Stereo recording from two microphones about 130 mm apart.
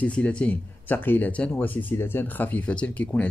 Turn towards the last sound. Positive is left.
turn(degrees=10)  # may be behind; listen again after turning